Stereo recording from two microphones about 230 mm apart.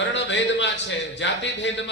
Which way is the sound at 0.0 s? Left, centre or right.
Left.